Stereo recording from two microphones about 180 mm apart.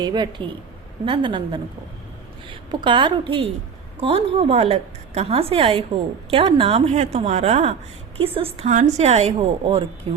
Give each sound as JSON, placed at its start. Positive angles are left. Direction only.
{"t": 0.0, "sound": "a woman's voice", "side_deg": -25}